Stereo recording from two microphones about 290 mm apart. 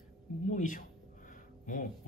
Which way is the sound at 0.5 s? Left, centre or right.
Left.